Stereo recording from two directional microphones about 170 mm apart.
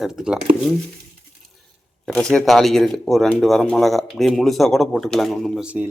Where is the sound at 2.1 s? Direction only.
5° left (ahead or behind).